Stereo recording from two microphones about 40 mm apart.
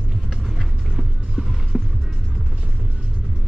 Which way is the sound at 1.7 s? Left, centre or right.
Centre.